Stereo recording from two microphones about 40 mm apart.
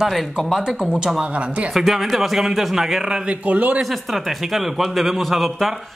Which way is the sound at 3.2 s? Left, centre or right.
Right.